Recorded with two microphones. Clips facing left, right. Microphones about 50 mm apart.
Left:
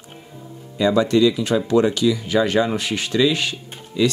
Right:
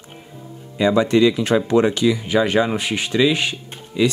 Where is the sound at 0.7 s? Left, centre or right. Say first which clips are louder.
Right 1 dB; right.